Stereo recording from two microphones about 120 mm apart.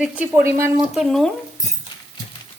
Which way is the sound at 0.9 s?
Centre (ahead or behind).